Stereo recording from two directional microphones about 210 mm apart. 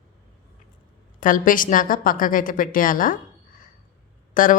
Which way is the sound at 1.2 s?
40° left (ahead or behind).